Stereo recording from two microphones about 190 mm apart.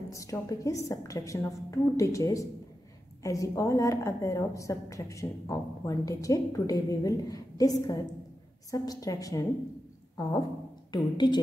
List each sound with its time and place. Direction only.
0.1 s a woman's voice: 15° left (ahead or behind)
10.9 s speech: 20° left (ahead or behind)